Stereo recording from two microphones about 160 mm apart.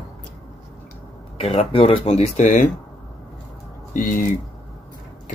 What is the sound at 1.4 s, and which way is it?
Speech, 40° left (ahead or behind).